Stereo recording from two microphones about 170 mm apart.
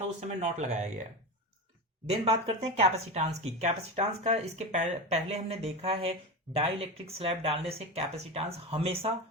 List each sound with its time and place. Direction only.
0.2 s speech: 40° right (ahead or behind)
2.0 s speech: 35° right (ahead or behind)